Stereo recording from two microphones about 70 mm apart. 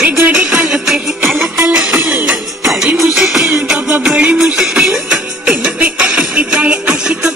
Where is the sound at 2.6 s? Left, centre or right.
Centre.